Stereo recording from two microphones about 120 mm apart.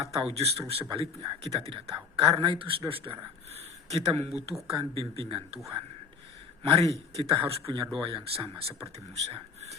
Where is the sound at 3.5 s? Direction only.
60° right (ahead or behind).